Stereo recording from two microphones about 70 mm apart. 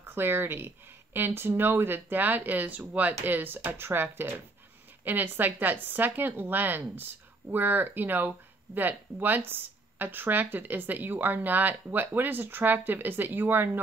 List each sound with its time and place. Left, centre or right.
0.0 s speech: right